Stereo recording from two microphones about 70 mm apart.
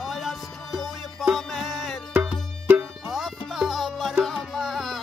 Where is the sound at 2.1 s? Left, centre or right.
Right.